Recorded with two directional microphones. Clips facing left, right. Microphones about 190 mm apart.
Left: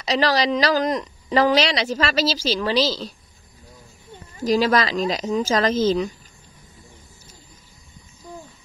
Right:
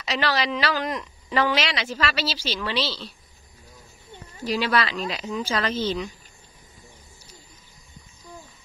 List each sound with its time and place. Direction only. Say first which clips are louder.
0.0 s a woman's voice: left 5 dB; 40° left (ahead or behind)
4.5 s a woman's voice: left 5 dB; 40° left (ahead or behind)